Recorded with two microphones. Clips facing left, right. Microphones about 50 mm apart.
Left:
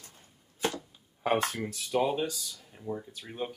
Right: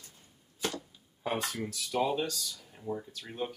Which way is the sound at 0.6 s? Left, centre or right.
Left.